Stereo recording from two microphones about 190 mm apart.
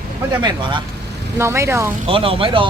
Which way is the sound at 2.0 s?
30° right (ahead or behind).